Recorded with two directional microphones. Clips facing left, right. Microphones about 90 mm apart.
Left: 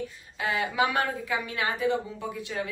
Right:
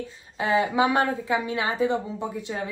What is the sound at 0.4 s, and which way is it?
Speech, 25° right (ahead or behind).